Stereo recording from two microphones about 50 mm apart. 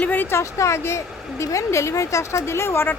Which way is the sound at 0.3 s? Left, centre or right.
Left.